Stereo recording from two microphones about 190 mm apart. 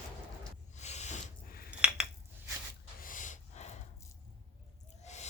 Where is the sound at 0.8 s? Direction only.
35° left (ahead or behind).